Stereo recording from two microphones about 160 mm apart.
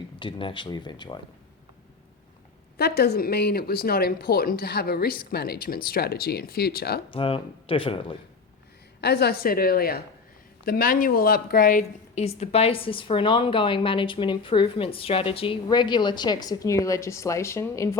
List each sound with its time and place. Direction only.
0.2 s speech: 30° left (ahead or behind)
2.7 s speech: 85° left
7.1 s a woman's voice: 35° left (ahead or behind)
9.0 s speech: 90° left; by 11.9 s 60° left (ahead or behind)
12.1 s a woman's voice: 40° left (ahead or behind); by 17.8 s 15° left (ahead or behind)